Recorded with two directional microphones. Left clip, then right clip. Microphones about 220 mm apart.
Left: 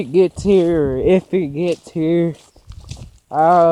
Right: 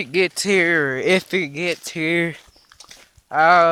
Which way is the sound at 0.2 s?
25° right (ahead or behind).